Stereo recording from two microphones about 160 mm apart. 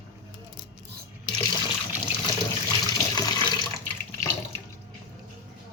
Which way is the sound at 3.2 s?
25° left (ahead or behind).